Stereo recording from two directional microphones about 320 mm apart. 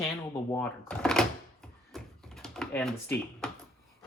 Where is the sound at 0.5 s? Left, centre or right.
Centre.